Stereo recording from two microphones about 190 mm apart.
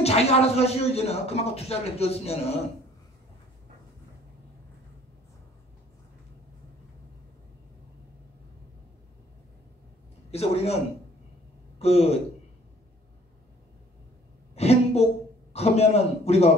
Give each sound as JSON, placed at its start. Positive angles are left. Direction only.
{"t": 0.0, "sound": "a man's voice", "side_deg": 35}
{"t": 10.3, "sound": "a man's voice", "side_deg": 35}
{"t": 11.8, "sound": "a man's voice", "side_deg": 35}
{"t": 14.5, "sound": "a sound", "side_deg": 35}
{"t": 15.5, "sound": "a man's voice", "side_deg": 35}